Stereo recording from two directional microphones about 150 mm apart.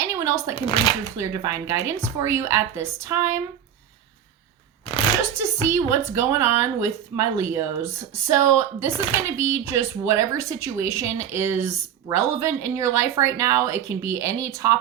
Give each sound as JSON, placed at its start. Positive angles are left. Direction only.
{"t": 0.0, "sound": "a sound", "side_deg": -20}
{"t": 0.5, "sound": "speech", "side_deg": 35}
{"t": 1.2, "sound": "speech", "side_deg": -20}
{"t": 5.3, "sound": "speech", "side_deg": -20}